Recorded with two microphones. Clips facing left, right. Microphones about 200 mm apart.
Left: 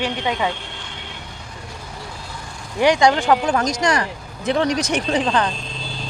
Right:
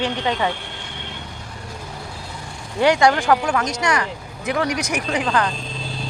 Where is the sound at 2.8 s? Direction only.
15° left (ahead or behind).